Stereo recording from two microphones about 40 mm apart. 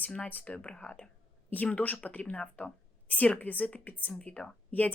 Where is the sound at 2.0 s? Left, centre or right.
Left.